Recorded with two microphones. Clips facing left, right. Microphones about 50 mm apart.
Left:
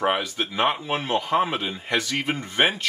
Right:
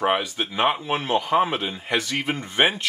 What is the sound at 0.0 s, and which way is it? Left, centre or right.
Speech, centre.